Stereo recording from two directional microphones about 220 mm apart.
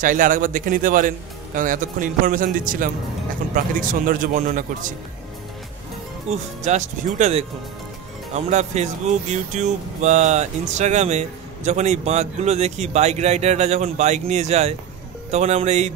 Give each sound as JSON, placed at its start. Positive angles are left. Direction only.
{"t": 0.0, "sound": "speech", "side_deg": -35}
{"t": 6.6, "sound": "speech", "side_deg": -30}
{"t": 8.5, "sound": "speech", "side_deg": -30}